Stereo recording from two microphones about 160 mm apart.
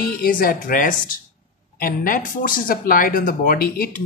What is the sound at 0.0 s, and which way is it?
Speech, 65° left (ahead or behind).